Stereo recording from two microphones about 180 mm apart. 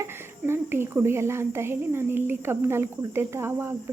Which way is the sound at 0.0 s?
15° right (ahead or behind).